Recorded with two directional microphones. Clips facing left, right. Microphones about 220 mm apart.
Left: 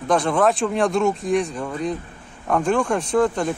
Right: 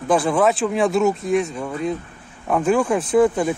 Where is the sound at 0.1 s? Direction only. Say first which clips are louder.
Right 1 dB; 5° right (ahead or behind).